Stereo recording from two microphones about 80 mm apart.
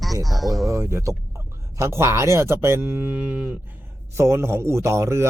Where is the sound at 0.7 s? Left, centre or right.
Right.